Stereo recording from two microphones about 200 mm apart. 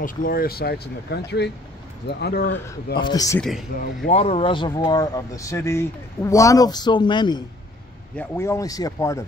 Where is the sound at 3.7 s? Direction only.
50° left (ahead or behind).